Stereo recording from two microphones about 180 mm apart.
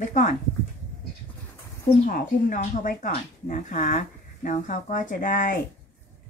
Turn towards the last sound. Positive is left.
turn(degrees=45)  # may be behind; listen again after turning